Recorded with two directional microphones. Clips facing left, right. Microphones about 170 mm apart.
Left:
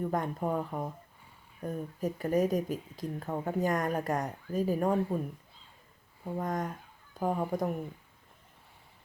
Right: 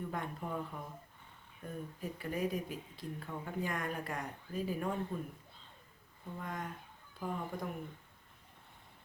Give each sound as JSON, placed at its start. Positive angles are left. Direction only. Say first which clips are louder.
{"t": 0.0, "sound": "speech", "louder": "left 9 dB", "side_deg": 45}
{"t": 6.4, "sound": "speech", "louder": "left 8 dB", "side_deg": 45}